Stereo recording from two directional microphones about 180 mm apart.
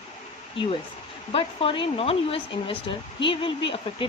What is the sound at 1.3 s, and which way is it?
Speech, 30° left (ahead or behind).